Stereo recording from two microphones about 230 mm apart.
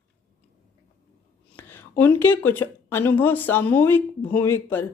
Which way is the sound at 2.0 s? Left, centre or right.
Centre.